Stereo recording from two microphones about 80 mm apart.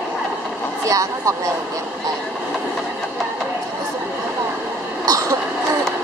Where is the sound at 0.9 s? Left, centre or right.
Right.